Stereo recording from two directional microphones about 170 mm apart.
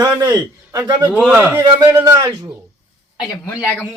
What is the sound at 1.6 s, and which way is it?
Speech, 20° right (ahead or behind).